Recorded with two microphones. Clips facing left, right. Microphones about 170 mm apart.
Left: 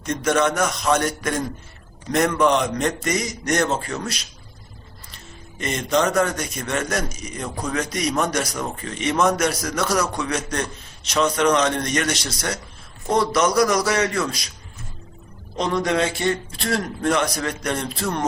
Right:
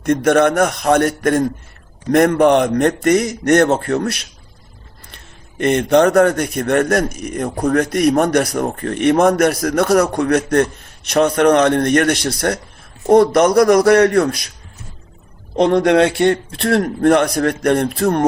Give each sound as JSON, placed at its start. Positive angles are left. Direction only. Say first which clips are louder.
{"t": 0.0, "sound": "speech", "louder": "right 7 dB", "side_deg": -55}
{"t": 15.5, "sound": "speech", "louder": "right 9 dB", "side_deg": -60}